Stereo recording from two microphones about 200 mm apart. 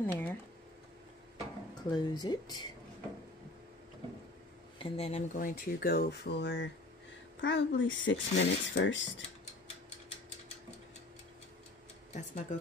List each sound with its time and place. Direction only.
0.0 s speech: 10° left (ahead or behind)
1.9 s speech: 20° left (ahead or behind)
4.7 s speech: 30° left (ahead or behind); by 9.2 s 65° left (ahead or behind)
12.1 s speech: 35° left (ahead or behind)